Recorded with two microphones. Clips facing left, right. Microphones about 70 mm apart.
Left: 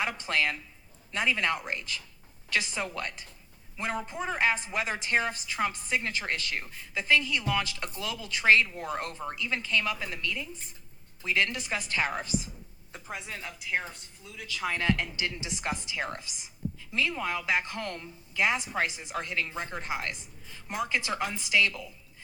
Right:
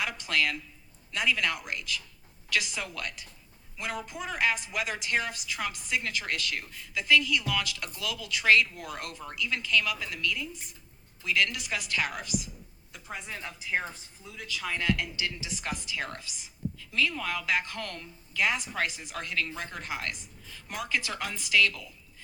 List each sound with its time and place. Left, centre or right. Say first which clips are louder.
0.0 s a woman's voice: left 1 dB; left
13.2 s speech: even; centre
14.4 s a woman's voice: left 1 dB; centre